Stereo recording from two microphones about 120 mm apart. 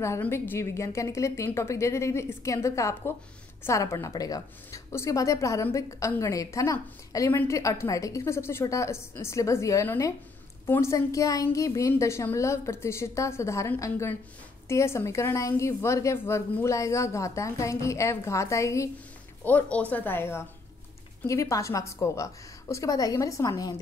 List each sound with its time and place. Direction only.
0.2 s a woman's voice: 20° left (ahead or behind)
19.4 s a woman's voice: 10° left (ahead or behind); by 23.8 s 30° left (ahead or behind)